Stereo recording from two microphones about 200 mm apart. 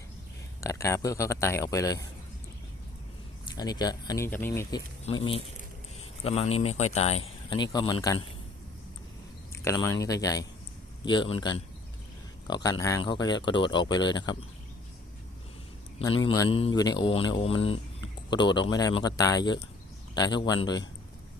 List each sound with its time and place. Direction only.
0.6 s speech: 15° left (ahead or behind)
3.5 s speech: 20° left (ahead or behind)
5.1 s speech: 30° left (ahead or behind)
6.2 s speech: 30° left (ahead or behind)
7.5 s speech: 20° left (ahead or behind)
9.5 s speech: 15° left (ahead or behind)
16.0 s speech: 25° left (ahead or behind)